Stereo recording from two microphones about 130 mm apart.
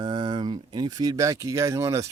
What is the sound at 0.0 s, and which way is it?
Speech, 35° right (ahead or behind).